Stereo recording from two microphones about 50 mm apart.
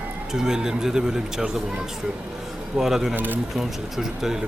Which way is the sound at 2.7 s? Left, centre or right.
Centre.